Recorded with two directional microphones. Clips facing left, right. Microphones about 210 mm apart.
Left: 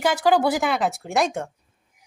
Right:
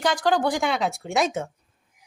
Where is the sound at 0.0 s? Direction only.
5° left (ahead or behind).